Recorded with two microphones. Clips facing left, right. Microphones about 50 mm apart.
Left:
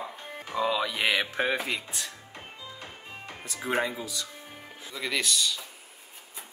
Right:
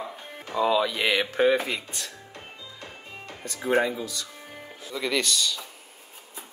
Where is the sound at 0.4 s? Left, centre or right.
Centre.